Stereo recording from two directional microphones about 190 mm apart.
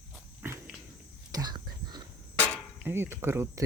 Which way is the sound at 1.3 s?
20° right (ahead or behind).